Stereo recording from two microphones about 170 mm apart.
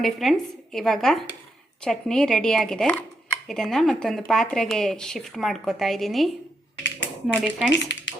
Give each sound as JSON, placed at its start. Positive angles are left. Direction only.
{"t": 0.0, "sound": "speech", "side_deg": 0}
{"t": 6.8, "sound": "a sound", "side_deg": 90}
{"t": 7.7, "sound": "speech", "side_deg": 90}